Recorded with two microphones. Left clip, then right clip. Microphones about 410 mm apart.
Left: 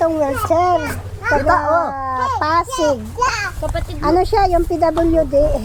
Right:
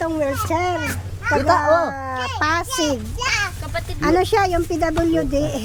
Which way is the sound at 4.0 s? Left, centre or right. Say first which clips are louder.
Left 2 dB; right.